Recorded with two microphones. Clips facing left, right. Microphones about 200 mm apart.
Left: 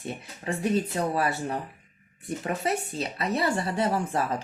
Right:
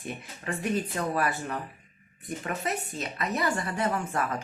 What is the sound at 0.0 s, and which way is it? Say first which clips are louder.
Speech: left 2 dB; 30° left (ahead or behind).